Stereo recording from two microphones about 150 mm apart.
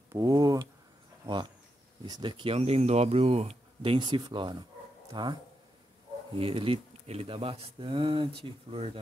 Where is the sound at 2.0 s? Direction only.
30° right (ahead or behind).